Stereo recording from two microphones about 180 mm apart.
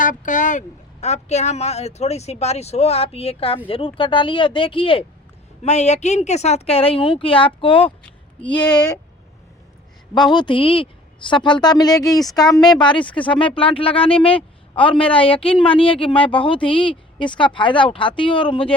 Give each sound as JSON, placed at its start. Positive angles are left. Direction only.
{"t": 0.0, "sound": "speech", "side_deg": 45}
{"t": 10.2, "sound": "speech", "side_deg": 25}